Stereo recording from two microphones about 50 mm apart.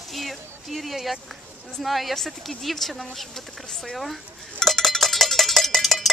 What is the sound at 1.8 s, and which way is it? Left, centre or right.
A woman's voice, centre.